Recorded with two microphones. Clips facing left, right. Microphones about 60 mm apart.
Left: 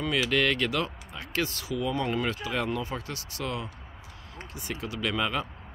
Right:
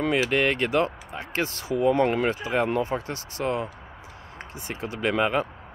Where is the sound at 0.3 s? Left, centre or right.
Right.